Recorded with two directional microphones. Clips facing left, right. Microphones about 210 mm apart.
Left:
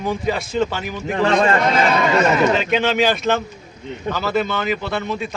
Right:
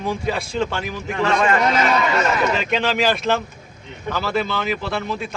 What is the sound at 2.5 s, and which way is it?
Speech, centre (ahead or behind).